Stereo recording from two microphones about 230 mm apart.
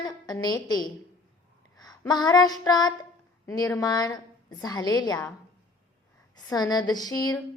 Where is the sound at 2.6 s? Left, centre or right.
Centre.